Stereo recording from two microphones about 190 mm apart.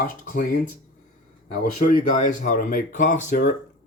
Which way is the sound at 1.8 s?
45° left (ahead or behind).